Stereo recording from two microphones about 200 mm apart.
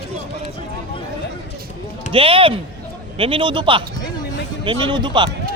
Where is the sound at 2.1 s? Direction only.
25° right (ahead or behind).